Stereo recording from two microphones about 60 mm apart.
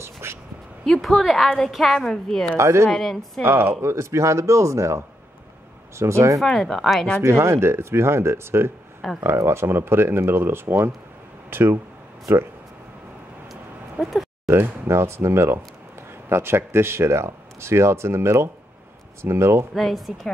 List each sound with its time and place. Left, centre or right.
0.0 s a sound: right
1.0 s a woman's voice: centre
2.5 s speech: right
2.9 s a woman's voice: centre
3.4 s speech: right
3.8 s speech: right
6.4 s a woman's voice: centre
7.2 s speech: right
9.0 s a woman's voice: centre
9.5 s speech: right
13.5 s a sound: centre
14.5 s speech: right
19.7 s a woman's voice: centre